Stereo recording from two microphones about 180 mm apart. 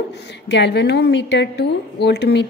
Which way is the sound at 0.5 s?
70° left (ahead or behind).